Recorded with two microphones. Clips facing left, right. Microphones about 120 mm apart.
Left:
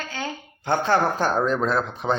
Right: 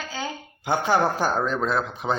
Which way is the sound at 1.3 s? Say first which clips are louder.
Left 2 dB; centre (ahead or behind).